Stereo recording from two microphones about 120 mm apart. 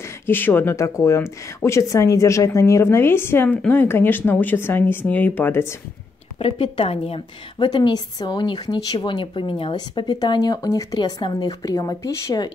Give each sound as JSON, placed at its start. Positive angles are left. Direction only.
{"t": 0.3, "sound": "speech", "side_deg": 15}
{"t": 6.3, "sound": "a woman's voice", "side_deg": 50}